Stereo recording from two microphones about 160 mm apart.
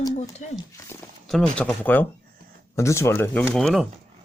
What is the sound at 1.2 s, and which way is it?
Speech, 5° left (ahead or behind).